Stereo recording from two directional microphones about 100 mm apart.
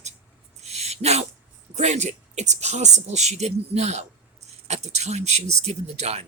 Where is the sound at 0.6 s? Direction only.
90° right.